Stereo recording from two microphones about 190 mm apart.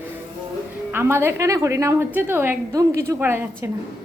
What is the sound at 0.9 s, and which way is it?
A woman's voice, 15° right (ahead or behind).